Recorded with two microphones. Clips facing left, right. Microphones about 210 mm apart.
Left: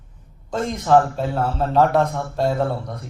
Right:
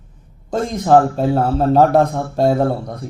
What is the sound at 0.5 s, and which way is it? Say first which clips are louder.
A man's voice: right 3 dB; 40° right (ahead or behind).